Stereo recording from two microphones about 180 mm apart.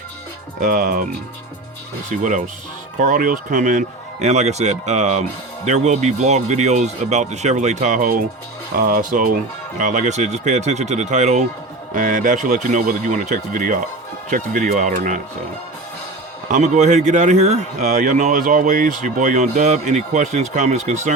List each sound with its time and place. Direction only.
0.6 s speech: 45° right (ahead or behind)
2.0 s speech: 45° right (ahead or behind)
16.5 s speech: 40° right (ahead or behind)